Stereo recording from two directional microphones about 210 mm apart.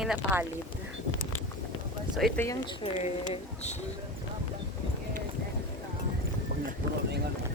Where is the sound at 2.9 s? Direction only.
35° left (ahead or behind).